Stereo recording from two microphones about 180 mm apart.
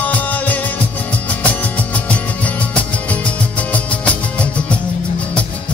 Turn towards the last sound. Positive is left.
turn(degrees=5)  # may be behind; listen again after turning